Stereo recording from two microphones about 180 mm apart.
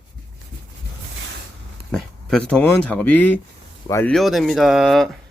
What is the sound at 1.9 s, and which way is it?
Speech, 5° left (ahead or behind).